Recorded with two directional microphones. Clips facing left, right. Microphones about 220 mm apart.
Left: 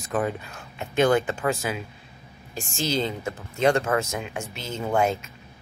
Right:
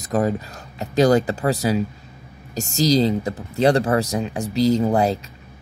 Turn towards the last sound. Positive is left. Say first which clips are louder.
# right 6 dB
turn(degrees=-35)  # may be behind; listen again after turning